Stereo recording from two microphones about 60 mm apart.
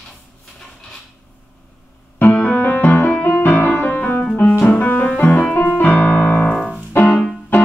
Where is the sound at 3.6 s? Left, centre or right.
Left.